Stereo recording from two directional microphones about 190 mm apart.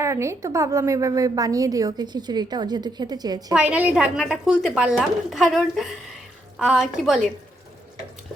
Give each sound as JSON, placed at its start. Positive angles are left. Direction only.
{"t": 0.0, "sound": "a woman's voice", "side_deg": -15}
{"t": 3.5, "sound": "speech", "side_deg": -5}